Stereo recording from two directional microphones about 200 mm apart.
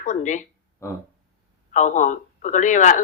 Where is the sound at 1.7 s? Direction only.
40° left (ahead or behind).